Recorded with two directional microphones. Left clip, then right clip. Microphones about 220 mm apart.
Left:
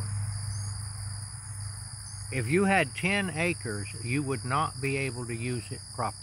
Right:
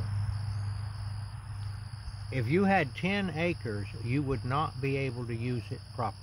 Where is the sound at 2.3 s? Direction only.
10° left (ahead or behind).